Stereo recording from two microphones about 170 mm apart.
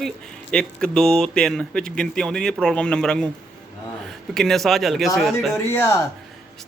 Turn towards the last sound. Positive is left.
turn(degrees=15)  # may be behind; listen again after turning